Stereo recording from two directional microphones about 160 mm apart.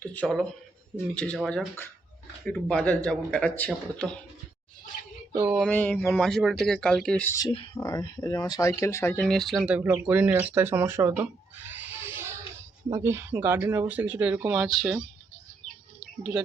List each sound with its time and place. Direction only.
0.0 s a man's voice: 10° left (ahead or behind)
5.4 s speech: 5° right (ahead or behind)
5.6 s speech: 10° left (ahead or behind)
7.8 s speech: 20° left (ahead or behind); by 15.0 s 5° right (ahead or behind)